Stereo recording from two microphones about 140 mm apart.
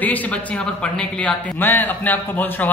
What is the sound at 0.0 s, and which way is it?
A man's voice, 10° left (ahead or behind).